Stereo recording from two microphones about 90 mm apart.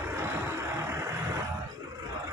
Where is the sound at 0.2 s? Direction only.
30° right (ahead or behind).